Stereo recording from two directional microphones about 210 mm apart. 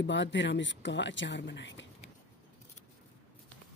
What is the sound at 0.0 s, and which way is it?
Speech, 60° left (ahead or behind).